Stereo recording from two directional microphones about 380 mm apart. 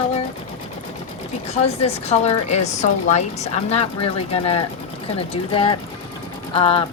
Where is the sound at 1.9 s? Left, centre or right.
Centre.